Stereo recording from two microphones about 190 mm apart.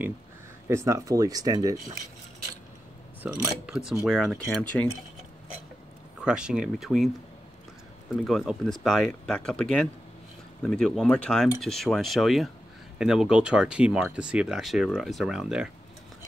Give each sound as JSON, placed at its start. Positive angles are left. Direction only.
{"t": 0.7, "sound": "speech", "side_deg": -15}
{"t": 3.6, "sound": "speech", "side_deg": -5}
{"t": 6.2, "sound": "speech", "side_deg": -5}
{"t": 8.2, "sound": "speech", "side_deg": 0}